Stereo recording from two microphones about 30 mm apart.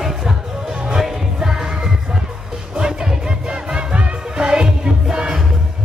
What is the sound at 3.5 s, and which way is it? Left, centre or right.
Music, right.